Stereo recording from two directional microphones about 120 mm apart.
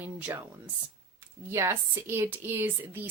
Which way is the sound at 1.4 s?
20° right (ahead or behind).